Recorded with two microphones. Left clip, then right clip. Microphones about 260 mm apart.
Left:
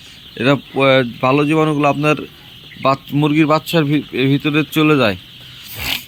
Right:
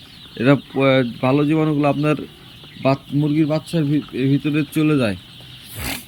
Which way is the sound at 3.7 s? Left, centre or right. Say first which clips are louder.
Left 5 dB; centre.